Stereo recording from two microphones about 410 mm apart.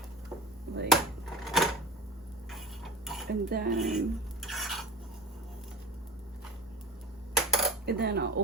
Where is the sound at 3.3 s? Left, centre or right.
Right.